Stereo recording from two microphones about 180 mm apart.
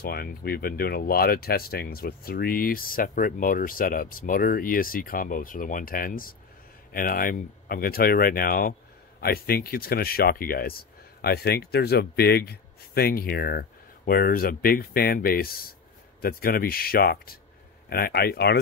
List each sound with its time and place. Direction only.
0.0 s speech: 60° left (ahead or behind)